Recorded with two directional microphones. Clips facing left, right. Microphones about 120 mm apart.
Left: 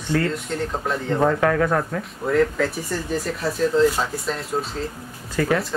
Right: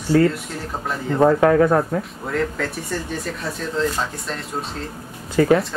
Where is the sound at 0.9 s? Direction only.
Centre (ahead or behind).